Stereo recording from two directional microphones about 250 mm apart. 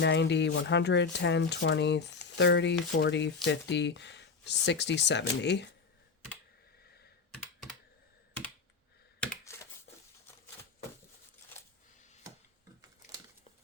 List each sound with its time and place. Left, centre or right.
0.0 s speech: left
9.2 s computer keyboard: centre